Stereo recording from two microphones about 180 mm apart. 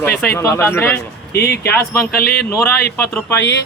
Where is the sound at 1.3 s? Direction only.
60° left (ahead or behind).